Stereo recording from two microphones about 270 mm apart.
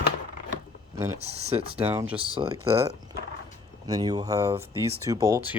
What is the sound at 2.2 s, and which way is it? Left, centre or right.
Speech, centre.